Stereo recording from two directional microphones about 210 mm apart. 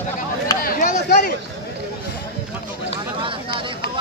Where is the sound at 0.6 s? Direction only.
45° left (ahead or behind).